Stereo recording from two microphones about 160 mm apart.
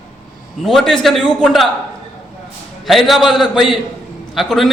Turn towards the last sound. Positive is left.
turn(degrees=0)  # may be behind; listen again after turning